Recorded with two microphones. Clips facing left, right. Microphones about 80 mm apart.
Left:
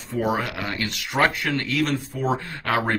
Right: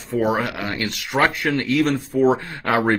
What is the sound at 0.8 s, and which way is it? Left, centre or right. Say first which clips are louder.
Speech: right 2 dB; centre.